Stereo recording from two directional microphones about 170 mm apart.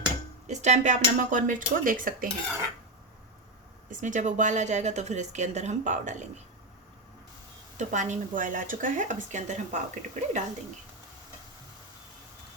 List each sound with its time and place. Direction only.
0.4 s speech: 40° right (ahead or behind)
3.8 s speech: 50° right (ahead or behind)
7.8 s speech: 45° right (ahead or behind)